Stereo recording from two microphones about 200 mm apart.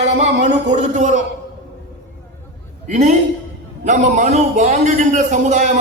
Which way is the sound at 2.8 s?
35° right (ahead or behind).